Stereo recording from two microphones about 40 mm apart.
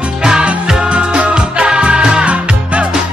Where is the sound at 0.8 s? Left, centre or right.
Right.